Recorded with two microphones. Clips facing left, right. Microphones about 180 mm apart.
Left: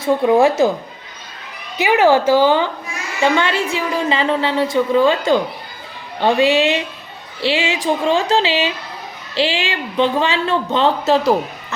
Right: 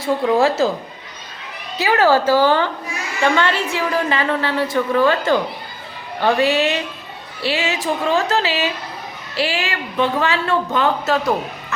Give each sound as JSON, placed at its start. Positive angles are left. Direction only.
{"t": 0.0, "sound": "a woman's voice", "side_deg": 20}
{"t": 1.8, "sound": "a woman's voice", "side_deg": 15}